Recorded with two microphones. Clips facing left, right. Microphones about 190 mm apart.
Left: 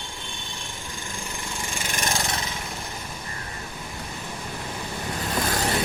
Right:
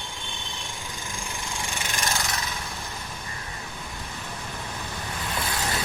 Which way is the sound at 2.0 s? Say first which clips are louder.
Left 2 dB; 30° left (ahead or behind).